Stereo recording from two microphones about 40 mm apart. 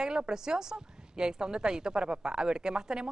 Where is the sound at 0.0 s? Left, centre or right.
Centre.